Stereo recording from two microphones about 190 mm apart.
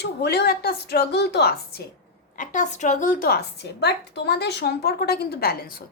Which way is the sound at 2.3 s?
40° left (ahead or behind).